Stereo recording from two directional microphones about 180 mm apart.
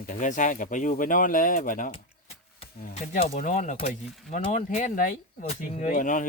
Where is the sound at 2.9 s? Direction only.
40° left (ahead or behind).